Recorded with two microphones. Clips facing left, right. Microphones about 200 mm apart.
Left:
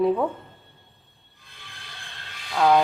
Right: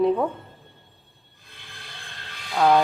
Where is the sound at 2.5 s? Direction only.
5° right (ahead or behind).